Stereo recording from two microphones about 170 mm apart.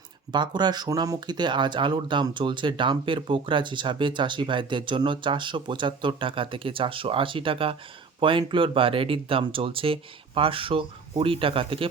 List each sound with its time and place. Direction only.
0.3 s speech: 25° right (ahead or behind)